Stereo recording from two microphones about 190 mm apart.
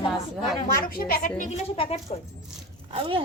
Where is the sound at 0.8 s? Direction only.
50° left (ahead or behind).